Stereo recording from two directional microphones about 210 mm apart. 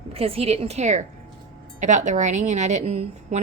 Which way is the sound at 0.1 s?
30° right (ahead or behind).